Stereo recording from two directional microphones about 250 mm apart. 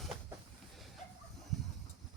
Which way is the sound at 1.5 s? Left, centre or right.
Centre.